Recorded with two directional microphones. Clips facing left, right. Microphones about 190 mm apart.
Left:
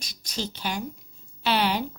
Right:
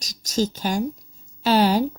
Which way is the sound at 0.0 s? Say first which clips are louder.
Right 10 dB; 40° right (ahead or behind).